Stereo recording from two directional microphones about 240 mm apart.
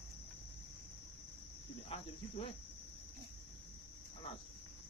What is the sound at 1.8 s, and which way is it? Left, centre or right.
Cricket, left.